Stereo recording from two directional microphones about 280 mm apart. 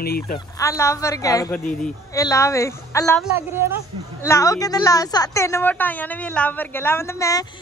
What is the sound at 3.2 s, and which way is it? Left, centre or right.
Speech, centre.